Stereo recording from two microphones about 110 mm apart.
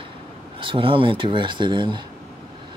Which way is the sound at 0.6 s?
50° right (ahead or behind).